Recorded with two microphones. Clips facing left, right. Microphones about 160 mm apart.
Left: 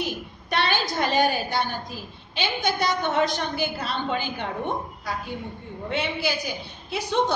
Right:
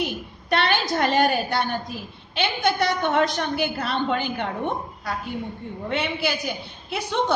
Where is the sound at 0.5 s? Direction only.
55° right (ahead or behind).